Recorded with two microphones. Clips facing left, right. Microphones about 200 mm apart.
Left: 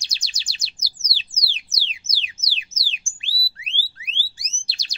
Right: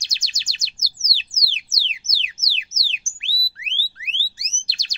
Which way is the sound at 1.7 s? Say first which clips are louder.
Right 1 dB; 30° left (ahead or behind).